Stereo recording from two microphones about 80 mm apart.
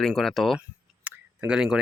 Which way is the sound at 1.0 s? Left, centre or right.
Right.